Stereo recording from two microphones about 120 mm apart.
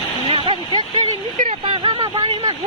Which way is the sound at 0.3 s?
45° right (ahead or behind).